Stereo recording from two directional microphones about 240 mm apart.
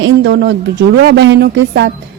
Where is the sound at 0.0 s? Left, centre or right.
Right.